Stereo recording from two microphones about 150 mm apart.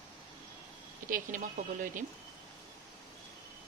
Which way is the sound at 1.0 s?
65° right (ahead or behind).